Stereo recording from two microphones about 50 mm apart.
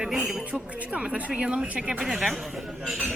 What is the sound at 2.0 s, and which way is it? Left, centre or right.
Speech, centre.